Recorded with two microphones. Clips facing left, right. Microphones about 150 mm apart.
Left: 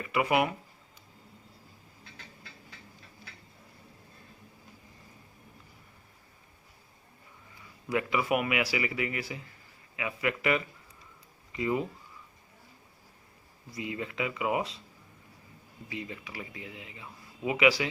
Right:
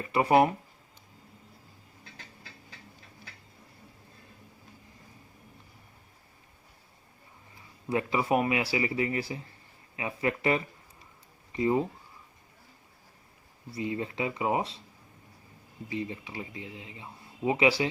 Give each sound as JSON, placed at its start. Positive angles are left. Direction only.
{"t": 0.0, "sound": "speech", "side_deg": -35}
{"t": 7.6, "sound": "speech", "side_deg": -30}
{"t": 13.7, "sound": "speech", "side_deg": -30}
{"t": 15.9, "sound": "speech", "side_deg": -30}